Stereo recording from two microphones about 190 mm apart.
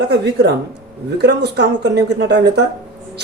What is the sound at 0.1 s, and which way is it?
Speech, 60° right (ahead or behind).